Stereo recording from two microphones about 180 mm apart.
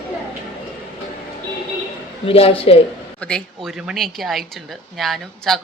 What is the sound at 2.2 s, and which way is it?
Speech, 30° left (ahead or behind).